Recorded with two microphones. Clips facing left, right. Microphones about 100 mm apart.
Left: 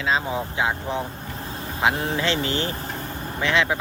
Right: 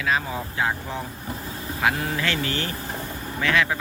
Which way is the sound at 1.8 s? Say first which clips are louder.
Left 2 dB; 25° left (ahead or behind).